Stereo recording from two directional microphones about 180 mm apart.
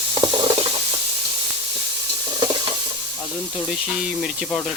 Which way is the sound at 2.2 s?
25° right (ahead or behind).